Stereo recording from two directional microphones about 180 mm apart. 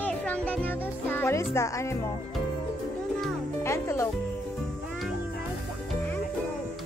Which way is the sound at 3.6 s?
15° left (ahead or behind).